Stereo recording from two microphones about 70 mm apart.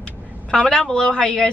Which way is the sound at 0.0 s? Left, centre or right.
Centre.